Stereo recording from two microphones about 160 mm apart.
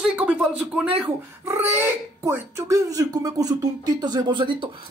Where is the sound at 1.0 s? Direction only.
15° right (ahead or behind).